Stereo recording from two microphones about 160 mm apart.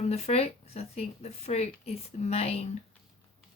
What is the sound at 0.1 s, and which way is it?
Speech, 40° left (ahead or behind).